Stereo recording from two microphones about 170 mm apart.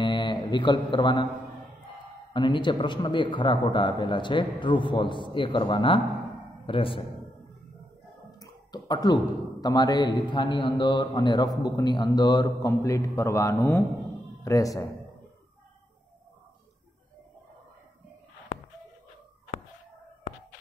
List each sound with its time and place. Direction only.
0.0 s mantra: 25° left (ahead or behind)
2.3 s a man's voice: 30° left (ahead or behind)
8.4 s a sound: 25° left (ahead or behind)
9.6 s a man's voice: 25° left (ahead or behind)